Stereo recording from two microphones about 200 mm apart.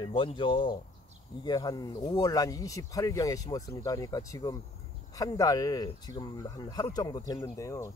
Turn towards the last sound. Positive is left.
turn(degrees=15)  # may be behind; listen again after turning